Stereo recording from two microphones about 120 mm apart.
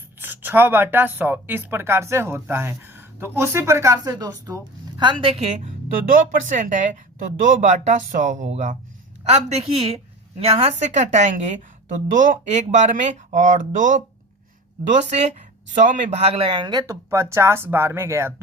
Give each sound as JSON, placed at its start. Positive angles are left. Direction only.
{"t": 0.2, "sound": "speech", "side_deg": -15}
{"t": 5.3, "sound": "a woman's voice", "side_deg": -65}
{"t": 6.5, "sound": "a woman's voice", "side_deg": -90}
{"t": 14.8, "sound": "speech", "side_deg": -70}